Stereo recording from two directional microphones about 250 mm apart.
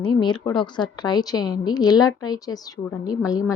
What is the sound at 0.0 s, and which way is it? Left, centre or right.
A woman's voice, centre.